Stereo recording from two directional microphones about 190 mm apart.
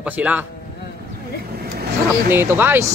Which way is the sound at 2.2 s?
10° right (ahead or behind).